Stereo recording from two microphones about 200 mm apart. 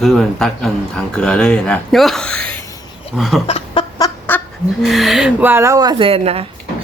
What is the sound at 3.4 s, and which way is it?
Chicken, 25° left (ahead or behind).